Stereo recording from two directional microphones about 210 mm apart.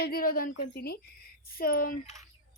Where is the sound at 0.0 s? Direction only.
45° left (ahead or behind).